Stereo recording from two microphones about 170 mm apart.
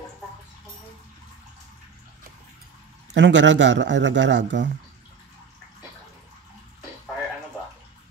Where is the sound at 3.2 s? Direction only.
90° right.